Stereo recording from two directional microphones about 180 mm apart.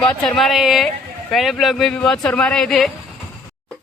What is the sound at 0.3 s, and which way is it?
Speech, centre (ahead or behind).